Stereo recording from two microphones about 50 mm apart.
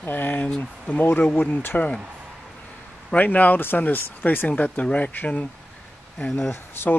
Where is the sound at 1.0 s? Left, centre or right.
Left.